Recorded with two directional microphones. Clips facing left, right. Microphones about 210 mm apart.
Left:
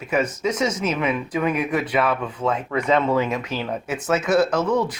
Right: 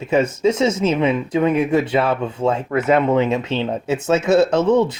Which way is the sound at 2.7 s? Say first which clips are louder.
Right 3 dB; 5° right (ahead or behind).